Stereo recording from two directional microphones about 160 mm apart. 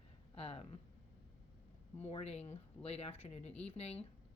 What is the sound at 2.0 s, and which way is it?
A woman's voice, 40° left (ahead or behind).